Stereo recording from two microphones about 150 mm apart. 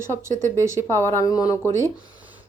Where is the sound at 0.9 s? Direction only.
20° left (ahead or behind).